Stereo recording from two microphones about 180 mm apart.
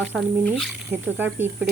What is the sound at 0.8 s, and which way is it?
Speech, 10° right (ahead or behind).